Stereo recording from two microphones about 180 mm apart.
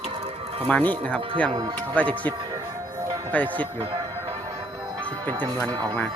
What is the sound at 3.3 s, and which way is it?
Speech, 10° left (ahead or behind).